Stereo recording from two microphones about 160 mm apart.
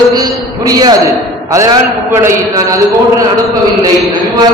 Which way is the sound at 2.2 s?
20° right (ahead or behind).